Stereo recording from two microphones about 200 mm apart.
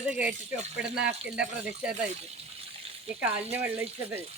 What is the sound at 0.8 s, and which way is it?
Speech, 60° right (ahead or behind).